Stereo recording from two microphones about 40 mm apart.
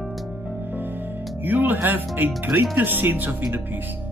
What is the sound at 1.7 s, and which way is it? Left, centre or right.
Speech, right.